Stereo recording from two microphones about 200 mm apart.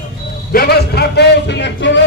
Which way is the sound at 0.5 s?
50° left (ahead or behind).